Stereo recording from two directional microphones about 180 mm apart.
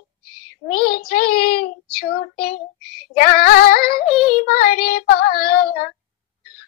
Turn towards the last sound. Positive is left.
turn(degrees=55)  # may be behind; listen again after turning